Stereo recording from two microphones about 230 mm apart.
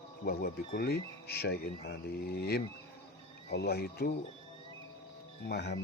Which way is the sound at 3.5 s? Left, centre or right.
Left.